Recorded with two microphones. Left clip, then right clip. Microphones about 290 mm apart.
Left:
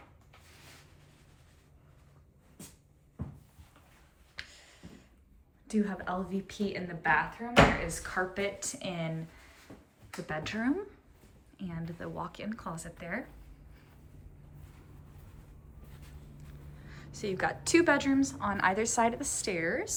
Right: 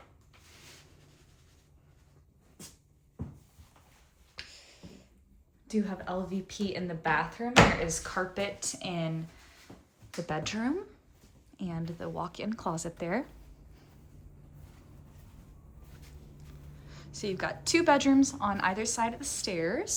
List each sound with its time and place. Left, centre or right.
4.4 s finger snapping: centre
5.6 s a woman's voice: centre
10.2 s speech: centre
16.8 s a woman's voice: centre